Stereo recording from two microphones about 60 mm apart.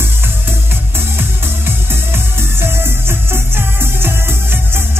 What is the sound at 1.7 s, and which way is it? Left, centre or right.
Music, right.